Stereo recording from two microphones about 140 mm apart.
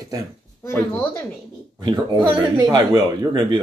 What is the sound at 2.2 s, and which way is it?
Speech, 10° right (ahead or behind).